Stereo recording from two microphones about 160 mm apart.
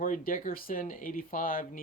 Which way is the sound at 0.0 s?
60° left (ahead or behind).